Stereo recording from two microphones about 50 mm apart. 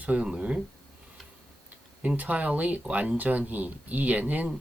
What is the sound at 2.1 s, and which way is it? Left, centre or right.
Speech, right.